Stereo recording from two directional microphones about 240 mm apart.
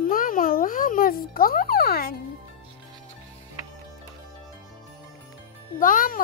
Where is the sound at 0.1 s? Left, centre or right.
Left.